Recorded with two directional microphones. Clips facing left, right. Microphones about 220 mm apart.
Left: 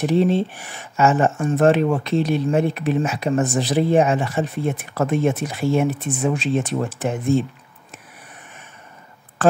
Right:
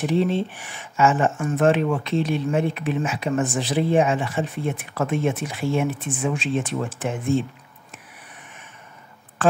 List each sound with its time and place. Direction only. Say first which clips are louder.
0.0 s speech: left 3 dB; 40° left (ahead or behind)
9.4 s speech: left 3 dB; 40° left (ahead or behind)